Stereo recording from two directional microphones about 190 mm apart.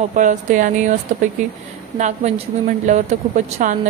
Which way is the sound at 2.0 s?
35° right (ahead or behind).